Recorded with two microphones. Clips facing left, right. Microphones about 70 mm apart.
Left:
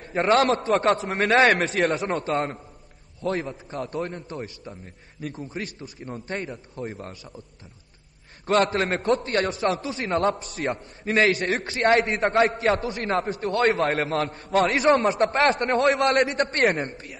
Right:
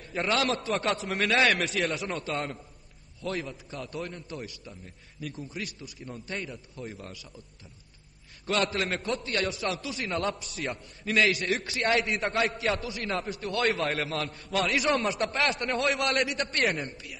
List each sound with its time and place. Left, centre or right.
0.0 s a man's voice: left
8.5 s a man's voice: left